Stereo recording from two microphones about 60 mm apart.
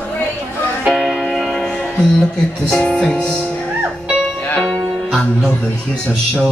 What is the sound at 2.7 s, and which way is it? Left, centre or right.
Music, centre.